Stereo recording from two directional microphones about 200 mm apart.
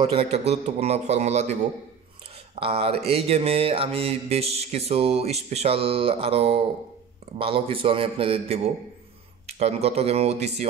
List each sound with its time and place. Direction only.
0.0 s mantra: 30° right (ahead or behind)
0.5 s speech: 30° right (ahead or behind)
2.5 s mantra: 30° right (ahead or behind)
9.5 s speech: 30° right (ahead or behind)